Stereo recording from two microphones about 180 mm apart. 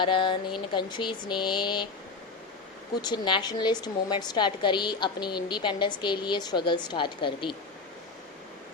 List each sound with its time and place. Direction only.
0.0 s a woman's voice: 25° left (ahead or behind)
3.0 s a woman's voice: 25° left (ahead or behind)